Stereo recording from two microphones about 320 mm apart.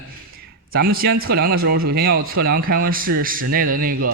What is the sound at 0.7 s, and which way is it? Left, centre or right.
Speech, right.